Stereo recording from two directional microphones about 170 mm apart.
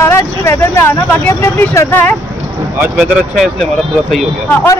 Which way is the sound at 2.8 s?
5° right (ahead or behind).